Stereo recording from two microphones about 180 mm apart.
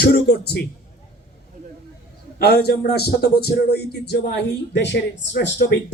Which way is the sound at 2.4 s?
65° left (ahead or behind).